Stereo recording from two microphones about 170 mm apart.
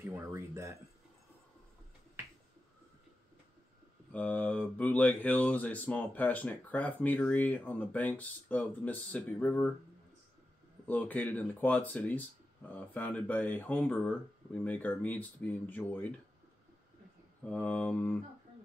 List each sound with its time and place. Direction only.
0.1 s speech: 15° right (ahead or behind)
4.1 s speech: 10° left (ahead or behind)
10.9 s speech: 10° left (ahead or behind)
17.5 s speech: 10° left (ahead or behind)